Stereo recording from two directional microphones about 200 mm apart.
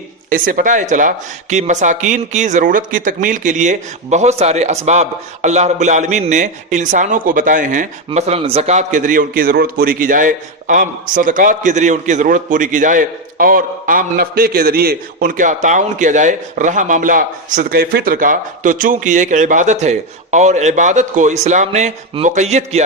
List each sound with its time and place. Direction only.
0.3 s speech: 45° right (ahead or behind)